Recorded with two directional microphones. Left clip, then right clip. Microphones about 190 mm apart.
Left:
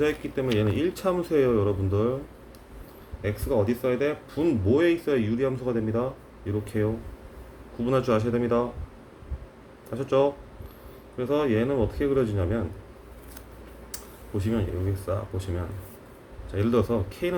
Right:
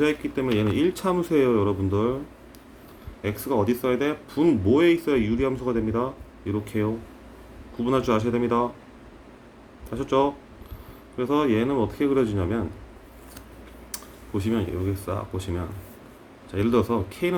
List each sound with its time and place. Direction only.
0.0 s speech: 15° right (ahead or behind)
3.2 s speech: 20° right (ahead or behind)
9.9 s speech: 15° right (ahead or behind)
13.9 s a sound: 20° right (ahead or behind)
15.0 s speech: 15° right (ahead or behind)